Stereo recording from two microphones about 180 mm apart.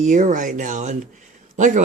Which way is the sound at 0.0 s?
45° right (ahead or behind).